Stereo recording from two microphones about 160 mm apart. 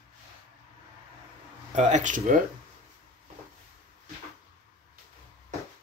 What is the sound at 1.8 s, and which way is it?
Speech, 50° right (ahead or behind).